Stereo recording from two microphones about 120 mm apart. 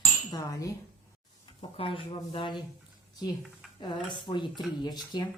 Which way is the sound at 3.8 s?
40° left (ahead or behind).